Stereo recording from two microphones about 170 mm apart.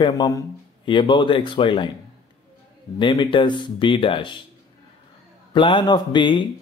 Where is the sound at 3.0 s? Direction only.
30° left (ahead or behind).